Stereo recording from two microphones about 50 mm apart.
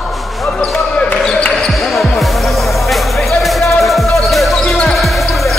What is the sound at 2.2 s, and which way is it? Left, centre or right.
Music, centre.